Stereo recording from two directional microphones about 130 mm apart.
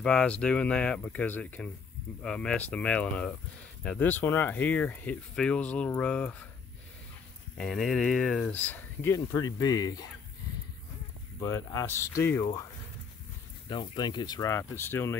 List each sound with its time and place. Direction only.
0.0 s speech: 10° left (ahead or behind)
7.5 s speech: centre (ahead or behind)
9.1 s speech: 25° left (ahead or behind)
11.3 s speech: 25° left (ahead or behind)
13.7 s speech: 35° left (ahead or behind); by 15.1 s 20° left (ahead or behind)